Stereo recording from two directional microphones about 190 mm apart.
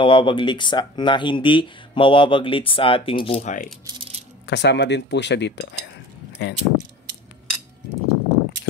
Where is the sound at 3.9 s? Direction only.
30° right (ahead or behind).